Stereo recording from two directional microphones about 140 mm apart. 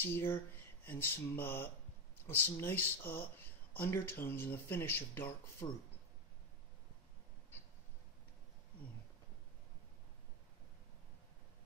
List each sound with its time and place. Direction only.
0.0 s speech: 15° left (ahead or behind)